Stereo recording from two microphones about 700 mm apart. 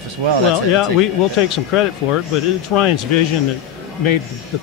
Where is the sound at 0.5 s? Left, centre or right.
Left.